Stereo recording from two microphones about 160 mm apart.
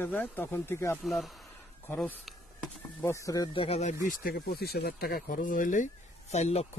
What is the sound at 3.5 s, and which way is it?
Speech, 40° left (ahead or behind).